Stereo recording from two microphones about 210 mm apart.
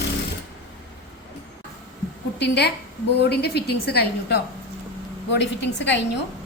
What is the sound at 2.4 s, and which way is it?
A woman's voice, 55° left (ahead or behind).